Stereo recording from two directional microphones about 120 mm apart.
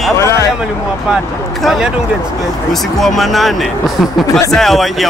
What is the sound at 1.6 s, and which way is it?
Speech, 5° right (ahead or behind).